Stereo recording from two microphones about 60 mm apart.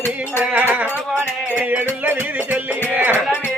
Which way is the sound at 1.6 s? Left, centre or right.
Right.